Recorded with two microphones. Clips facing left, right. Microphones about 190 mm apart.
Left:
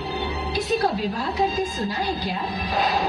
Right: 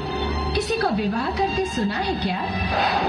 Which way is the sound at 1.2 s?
75° right (ahead or behind).